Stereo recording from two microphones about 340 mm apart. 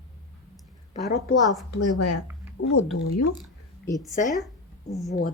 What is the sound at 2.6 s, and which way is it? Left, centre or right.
Speech, left.